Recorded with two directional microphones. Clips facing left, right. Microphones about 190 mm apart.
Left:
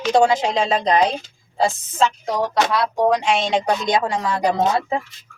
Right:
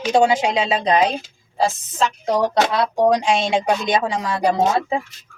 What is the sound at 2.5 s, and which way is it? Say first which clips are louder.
A woman's voice: right 1 dB; 20° right (ahead or behind).